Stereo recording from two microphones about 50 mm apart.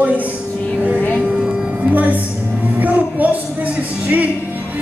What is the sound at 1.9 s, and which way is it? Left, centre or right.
Speech, right.